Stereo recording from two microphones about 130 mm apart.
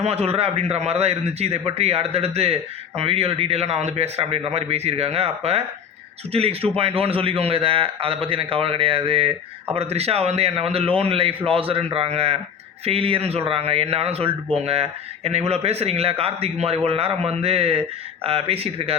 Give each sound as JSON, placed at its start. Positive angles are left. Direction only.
{"t": 0.0, "sound": "speech", "side_deg": -50}